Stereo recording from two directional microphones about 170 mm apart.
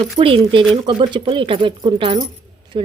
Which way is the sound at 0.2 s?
30° right (ahead or behind).